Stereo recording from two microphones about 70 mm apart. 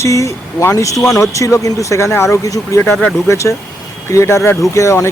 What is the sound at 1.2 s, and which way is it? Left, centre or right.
Speech, left.